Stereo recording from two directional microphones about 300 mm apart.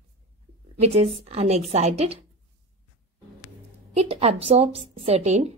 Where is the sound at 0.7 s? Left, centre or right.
Right.